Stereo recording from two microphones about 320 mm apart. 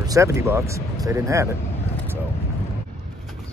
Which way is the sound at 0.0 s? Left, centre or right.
Centre.